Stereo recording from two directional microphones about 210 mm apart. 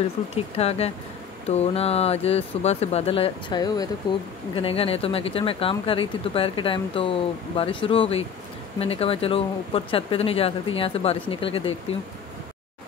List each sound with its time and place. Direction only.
0.6 s speech: 30° left (ahead or behind)